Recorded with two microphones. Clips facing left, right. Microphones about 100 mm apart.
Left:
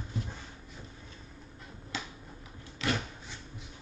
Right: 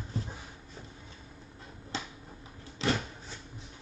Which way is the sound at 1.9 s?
30° right (ahead or behind).